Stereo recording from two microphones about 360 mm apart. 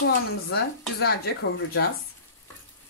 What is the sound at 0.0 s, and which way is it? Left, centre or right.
Speech, left.